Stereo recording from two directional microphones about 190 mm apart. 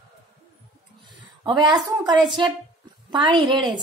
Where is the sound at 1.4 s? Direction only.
25° right (ahead or behind).